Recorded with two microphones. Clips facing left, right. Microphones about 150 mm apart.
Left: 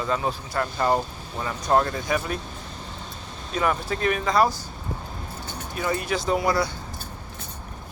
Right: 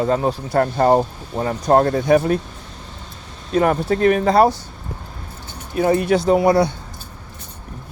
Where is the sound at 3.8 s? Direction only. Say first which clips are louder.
Right 9 dB; 40° right (ahead or behind).